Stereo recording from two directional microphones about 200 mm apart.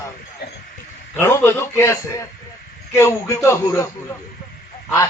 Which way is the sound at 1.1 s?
15° left (ahead or behind).